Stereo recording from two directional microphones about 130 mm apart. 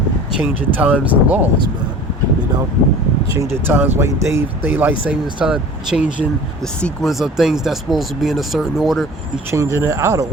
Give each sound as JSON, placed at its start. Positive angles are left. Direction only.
{"t": 0.3, "sound": "speech", "side_deg": -15}
{"t": 3.3, "sound": "speech", "side_deg": -20}
{"t": 6.6, "sound": "speech", "side_deg": 5}
{"t": 9.5, "sound": "speech", "side_deg": -25}